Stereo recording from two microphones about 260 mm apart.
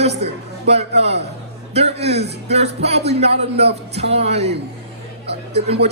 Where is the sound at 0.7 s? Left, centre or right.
Right.